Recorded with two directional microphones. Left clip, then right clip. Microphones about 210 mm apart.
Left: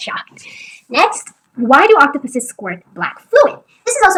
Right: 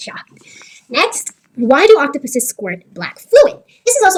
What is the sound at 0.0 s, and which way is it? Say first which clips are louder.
A woman's voice: left 6 dB; 20° right (ahead or behind).